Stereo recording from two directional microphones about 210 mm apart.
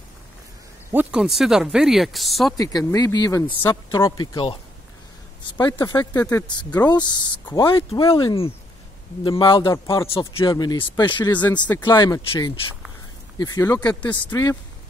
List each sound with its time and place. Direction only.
0.9 s speech: 5° right (ahead or behind)
2.5 s a woman's voice: 15° left (ahead or behind)
6.2 s speech: 5° left (ahead or behind)
6.5 s a man's voice: 20° left (ahead or behind)